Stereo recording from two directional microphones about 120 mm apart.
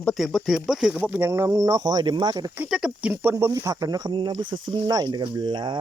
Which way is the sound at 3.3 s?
25° right (ahead or behind).